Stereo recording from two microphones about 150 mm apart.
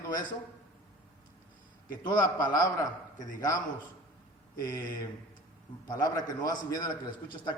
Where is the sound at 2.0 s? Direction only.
25° left (ahead or behind).